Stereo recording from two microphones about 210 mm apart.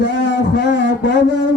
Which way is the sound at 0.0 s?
60° left (ahead or behind).